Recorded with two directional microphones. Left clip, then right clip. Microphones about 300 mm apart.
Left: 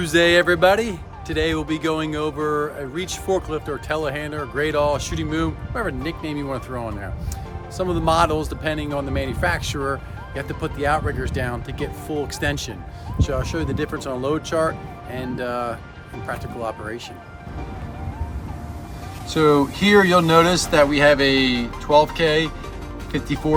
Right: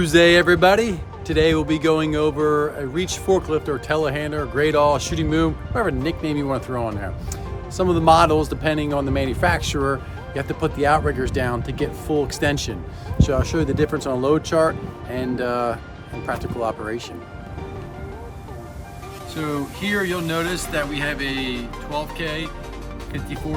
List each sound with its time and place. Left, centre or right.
0.0 s speech: centre
19.3 s speech: centre